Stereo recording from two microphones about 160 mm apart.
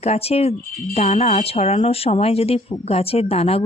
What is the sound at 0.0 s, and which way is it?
Speech, 40° left (ahead or behind).